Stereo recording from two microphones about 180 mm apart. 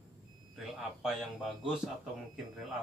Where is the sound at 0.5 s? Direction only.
Centre (ahead or behind).